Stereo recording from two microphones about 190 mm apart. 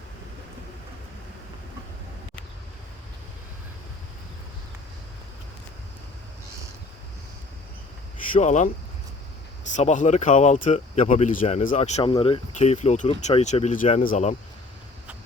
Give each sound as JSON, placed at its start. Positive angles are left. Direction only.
{"t": 8.3, "sound": "speech", "side_deg": 40}
{"t": 9.7, "sound": "speech", "side_deg": 40}